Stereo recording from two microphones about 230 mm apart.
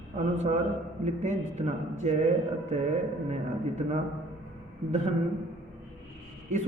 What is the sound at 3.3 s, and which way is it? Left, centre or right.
Speech, right.